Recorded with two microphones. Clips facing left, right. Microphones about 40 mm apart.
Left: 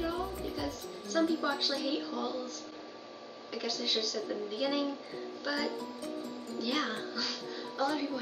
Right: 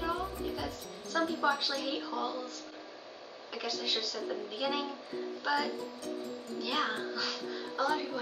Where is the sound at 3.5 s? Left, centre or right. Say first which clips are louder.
Left 1 dB; right.